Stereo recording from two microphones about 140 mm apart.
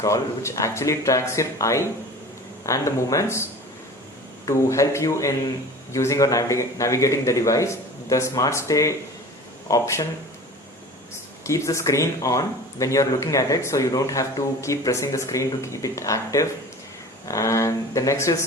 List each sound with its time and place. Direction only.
0.0 s speech: 25° left (ahead or behind)
4.4 s speech: 20° left (ahead or behind)
11.4 s speech: 20° left (ahead or behind)